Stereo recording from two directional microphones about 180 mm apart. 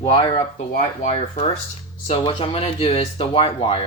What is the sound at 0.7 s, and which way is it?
Speech, 45° left (ahead or behind).